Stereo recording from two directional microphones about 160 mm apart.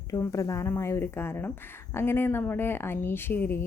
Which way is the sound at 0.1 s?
20° left (ahead or behind).